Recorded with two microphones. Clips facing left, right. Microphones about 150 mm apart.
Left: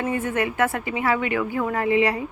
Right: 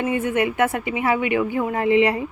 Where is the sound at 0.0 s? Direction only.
20° right (ahead or behind).